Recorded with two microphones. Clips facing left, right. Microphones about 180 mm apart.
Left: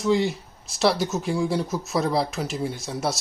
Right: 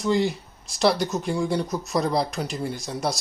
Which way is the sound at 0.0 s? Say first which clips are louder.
Left 1 dB; centre (ahead or behind).